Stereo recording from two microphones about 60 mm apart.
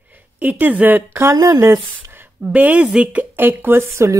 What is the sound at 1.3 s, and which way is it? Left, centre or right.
Speech, right.